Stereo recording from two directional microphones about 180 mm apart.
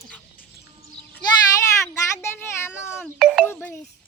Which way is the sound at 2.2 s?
15° left (ahead or behind).